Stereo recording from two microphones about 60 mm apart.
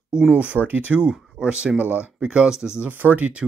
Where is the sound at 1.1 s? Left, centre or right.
Centre.